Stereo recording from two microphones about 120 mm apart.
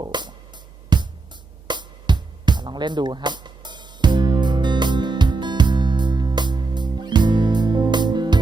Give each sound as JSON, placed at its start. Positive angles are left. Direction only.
{"t": 0.0, "sound": "music", "side_deg": -40}